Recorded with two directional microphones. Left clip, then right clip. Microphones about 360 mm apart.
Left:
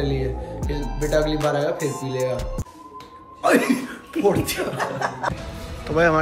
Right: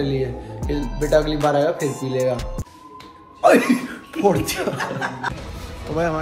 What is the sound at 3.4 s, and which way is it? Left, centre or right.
Speech, centre.